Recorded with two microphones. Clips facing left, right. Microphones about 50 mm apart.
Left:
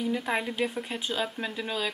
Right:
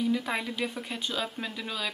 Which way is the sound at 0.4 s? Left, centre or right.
Left.